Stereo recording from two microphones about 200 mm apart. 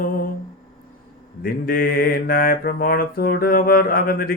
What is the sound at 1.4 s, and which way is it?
Mantra, 50° left (ahead or behind).